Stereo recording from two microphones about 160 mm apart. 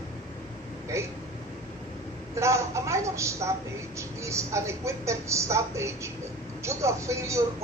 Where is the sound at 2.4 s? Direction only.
15° right (ahead or behind).